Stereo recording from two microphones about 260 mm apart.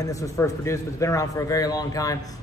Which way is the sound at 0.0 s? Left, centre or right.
Centre.